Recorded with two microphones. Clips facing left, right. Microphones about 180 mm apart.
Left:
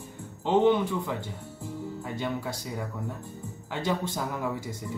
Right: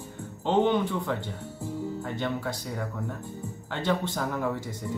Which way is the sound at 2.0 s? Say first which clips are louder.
Left 1 dB; 10° left (ahead or behind).